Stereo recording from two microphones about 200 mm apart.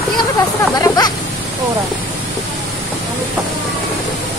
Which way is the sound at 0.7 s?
20° left (ahead or behind).